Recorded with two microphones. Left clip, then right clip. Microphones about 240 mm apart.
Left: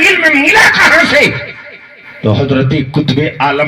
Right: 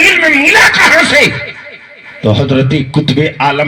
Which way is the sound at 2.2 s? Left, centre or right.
Right.